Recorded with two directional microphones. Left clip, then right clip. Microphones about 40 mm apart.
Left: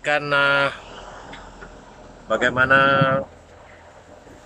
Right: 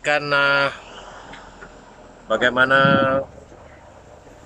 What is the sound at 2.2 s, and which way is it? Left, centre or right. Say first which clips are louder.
Speech: right 1 dB; right.